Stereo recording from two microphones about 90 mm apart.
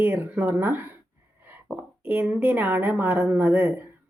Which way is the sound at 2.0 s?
20° right (ahead or behind).